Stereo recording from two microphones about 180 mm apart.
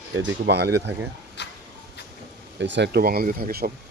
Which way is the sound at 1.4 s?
75° left (ahead or behind).